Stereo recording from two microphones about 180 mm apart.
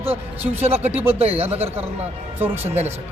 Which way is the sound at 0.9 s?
10° right (ahead or behind).